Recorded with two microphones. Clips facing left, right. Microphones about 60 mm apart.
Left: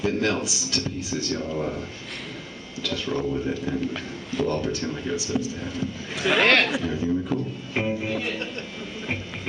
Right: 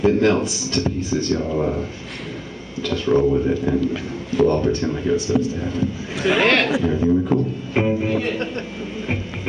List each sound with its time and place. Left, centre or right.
0.0 s a man's voice: centre
1.4 s speech: centre
3.1 s speech: right
3.4 s a man's voice: centre
5.1 s a man's voice: centre
7.7 s music: centre